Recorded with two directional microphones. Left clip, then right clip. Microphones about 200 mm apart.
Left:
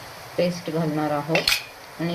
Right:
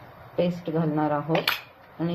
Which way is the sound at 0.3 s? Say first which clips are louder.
Left 2 dB; 5° left (ahead or behind).